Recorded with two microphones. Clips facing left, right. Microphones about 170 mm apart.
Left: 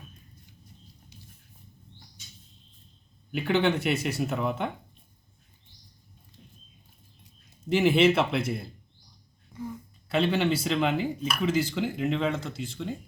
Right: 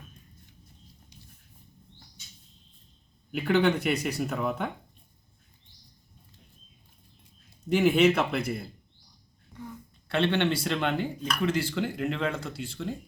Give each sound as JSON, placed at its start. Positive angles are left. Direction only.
{"t": 3.3, "sound": "speech", "side_deg": 0}
{"t": 7.7, "sound": "speech", "side_deg": 5}
{"t": 10.1, "sound": "speech", "side_deg": 5}